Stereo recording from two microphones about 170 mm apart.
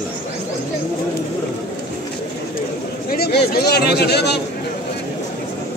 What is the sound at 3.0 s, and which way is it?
A man's voice, 65° left (ahead or behind).